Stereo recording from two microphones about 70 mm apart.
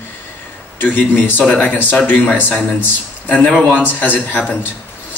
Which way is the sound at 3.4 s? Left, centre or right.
Centre.